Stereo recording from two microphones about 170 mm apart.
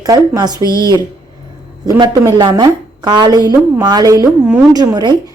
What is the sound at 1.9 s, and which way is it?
A woman's voice, 20° right (ahead or behind).